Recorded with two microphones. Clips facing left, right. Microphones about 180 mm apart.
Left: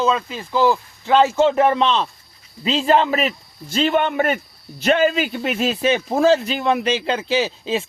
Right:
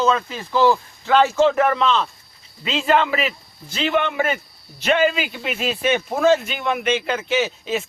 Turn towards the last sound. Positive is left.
turn(degrees=30)  # may be behind; listen again after turning